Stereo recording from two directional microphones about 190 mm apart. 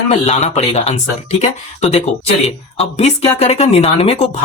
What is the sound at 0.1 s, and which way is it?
Speech, 35° left (ahead or behind).